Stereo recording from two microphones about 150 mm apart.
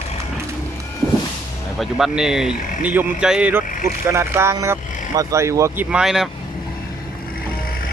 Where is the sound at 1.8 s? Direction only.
5° right (ahead or behind).